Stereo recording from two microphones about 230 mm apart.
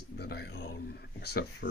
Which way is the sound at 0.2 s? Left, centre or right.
Left.